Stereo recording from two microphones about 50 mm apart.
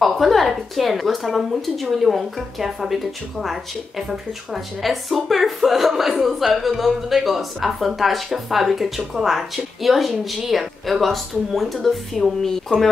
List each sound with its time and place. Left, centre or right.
0.0 s speech: centre
4.8 s speech: centre